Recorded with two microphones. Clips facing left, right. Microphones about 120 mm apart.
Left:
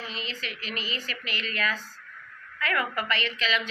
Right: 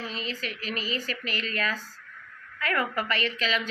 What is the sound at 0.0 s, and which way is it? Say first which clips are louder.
A woman's voice: right 3 dB; 45° right (ahead or behind).